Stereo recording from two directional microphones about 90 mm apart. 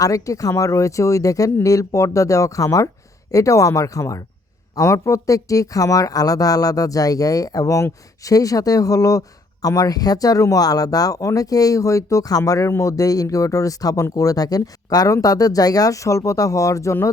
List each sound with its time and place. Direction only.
0.0 s speech: 40° left (ahead or behind)